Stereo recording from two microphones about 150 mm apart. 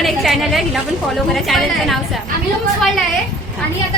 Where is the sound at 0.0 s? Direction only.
Centre (ahead or behind).